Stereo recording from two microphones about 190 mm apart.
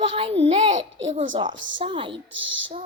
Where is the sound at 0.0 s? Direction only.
30° right (ahead or behind).